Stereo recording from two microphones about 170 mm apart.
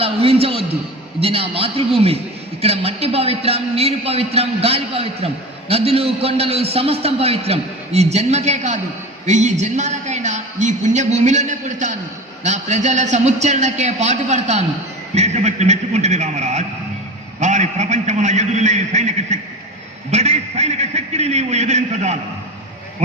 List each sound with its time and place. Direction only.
0.0 s a man's voice: 35° right (ahead or behind)